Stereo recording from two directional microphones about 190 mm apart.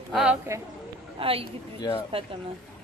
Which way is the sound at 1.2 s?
30° right (ahead or behind).